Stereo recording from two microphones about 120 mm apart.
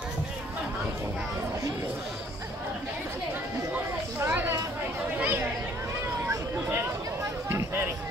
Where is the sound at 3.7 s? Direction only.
15° right (ahead or behind).